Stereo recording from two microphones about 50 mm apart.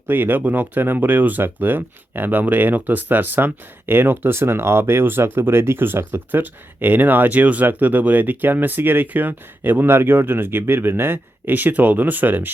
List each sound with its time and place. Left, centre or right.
0.1 s speech: right